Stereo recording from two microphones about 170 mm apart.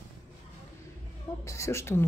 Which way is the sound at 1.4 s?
15° left (ahead or behind).